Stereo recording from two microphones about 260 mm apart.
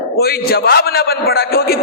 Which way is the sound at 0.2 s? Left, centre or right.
Left.